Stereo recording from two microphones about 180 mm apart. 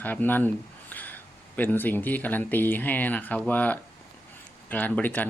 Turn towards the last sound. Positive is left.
turn(degrees=10)  # may be behind; listen again after turning